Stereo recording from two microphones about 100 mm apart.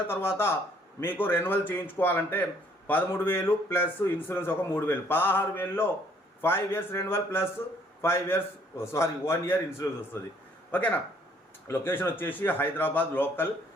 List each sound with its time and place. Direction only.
0.1 s a man's voice: 25° left (ahead or behind)